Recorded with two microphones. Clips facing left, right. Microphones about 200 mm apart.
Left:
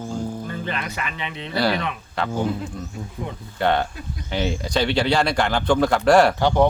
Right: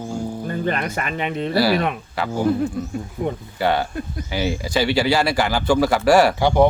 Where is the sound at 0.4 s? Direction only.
45° right (ahead or behind).